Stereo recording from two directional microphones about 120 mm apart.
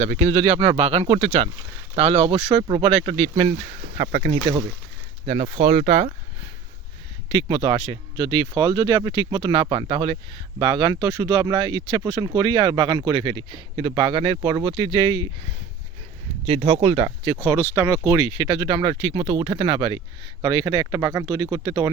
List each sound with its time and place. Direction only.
0.0 s speech: 65° right (ahead or behind)
2.5 s speech: 40° right (ahead or behind)
5.2 s speech: 65° right (ahead or behind)
7.3 s speech: 45° right (ahead or behind)
16.5 s speech: 50° right (ahead or behind)
17.4 s speech: 20° right (ahead or behind)
18.3 s speech: 35° right (ahead or behind)